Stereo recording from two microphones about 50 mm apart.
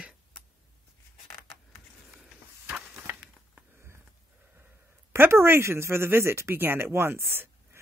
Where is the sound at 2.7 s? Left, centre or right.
Right.